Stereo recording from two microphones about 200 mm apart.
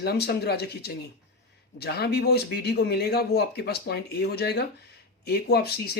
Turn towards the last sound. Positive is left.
turn(degrees=55)  # may be behind; listen again after turning